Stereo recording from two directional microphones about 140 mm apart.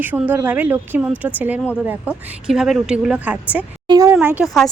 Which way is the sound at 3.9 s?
25° right (ahead or behind).